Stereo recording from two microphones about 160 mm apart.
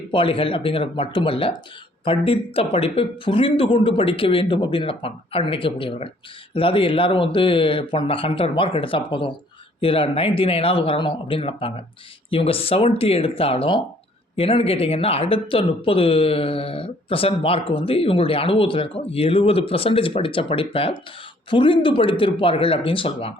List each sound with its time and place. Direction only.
0.1 s speech: 35° left (ahead or behind)